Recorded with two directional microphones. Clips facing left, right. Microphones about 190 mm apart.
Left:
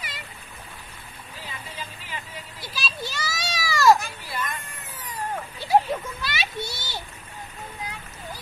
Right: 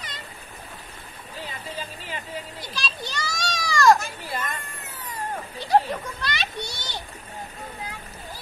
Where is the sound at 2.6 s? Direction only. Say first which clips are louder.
Even; 5° left (ahead or behind).